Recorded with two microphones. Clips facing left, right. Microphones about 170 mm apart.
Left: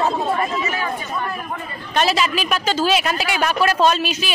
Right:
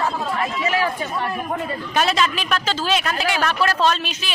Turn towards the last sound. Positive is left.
turn(degrees=10)  # may be behind; listen again after turning